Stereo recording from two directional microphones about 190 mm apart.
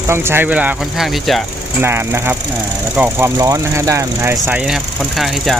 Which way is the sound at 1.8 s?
10° right (ahead or behind).